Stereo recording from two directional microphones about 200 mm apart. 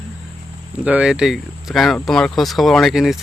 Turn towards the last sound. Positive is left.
turn(degrees=0)  # may be behind; listen again after turning